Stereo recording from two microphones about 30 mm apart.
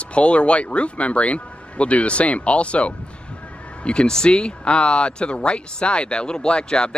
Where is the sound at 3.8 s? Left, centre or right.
Left.